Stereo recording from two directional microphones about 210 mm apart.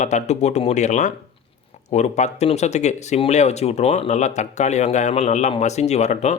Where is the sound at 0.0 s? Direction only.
35° left (ahead or behind).